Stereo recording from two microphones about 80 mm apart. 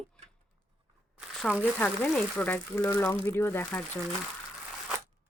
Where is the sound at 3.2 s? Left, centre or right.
Left.